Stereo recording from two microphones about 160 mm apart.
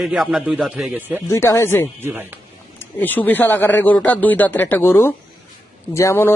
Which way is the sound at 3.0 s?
10° left (ahead or behind).